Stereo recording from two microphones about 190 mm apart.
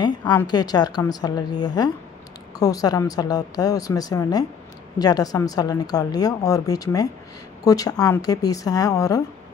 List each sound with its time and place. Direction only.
0.3 s a woman's voice: 20° left (ahead or behind)